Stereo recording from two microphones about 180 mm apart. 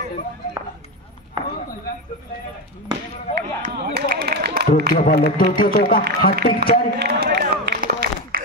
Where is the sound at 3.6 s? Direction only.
60° right (ahead or behind).